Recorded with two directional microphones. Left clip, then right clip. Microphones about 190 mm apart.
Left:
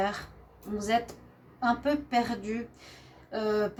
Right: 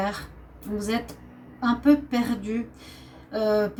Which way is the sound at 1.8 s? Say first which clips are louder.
Right 5 dB; 30° left (ahead or behind).